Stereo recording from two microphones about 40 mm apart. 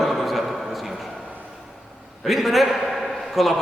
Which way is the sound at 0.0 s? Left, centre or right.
Centre.